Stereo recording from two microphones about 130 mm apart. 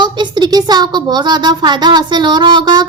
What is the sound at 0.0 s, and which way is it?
Speech, 35° right (ahead or behind).